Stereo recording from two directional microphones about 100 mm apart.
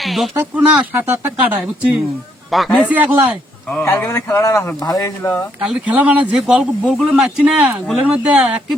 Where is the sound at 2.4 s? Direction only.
Centre (ahead or behind).